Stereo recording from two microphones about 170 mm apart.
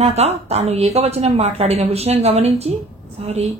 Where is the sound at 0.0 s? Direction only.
40° right (ahead or behind).